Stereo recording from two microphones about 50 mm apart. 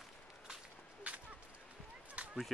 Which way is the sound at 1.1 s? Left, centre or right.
Right.